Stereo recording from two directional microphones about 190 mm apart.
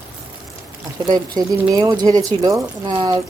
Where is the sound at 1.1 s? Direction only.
20° right (ahead or behind).